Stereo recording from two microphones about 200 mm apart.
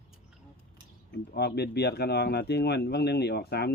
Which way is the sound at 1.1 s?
55° left (ahead or behind).